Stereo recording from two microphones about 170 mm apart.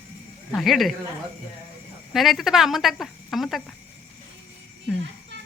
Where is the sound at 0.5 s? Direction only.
Centre (ahead or behind).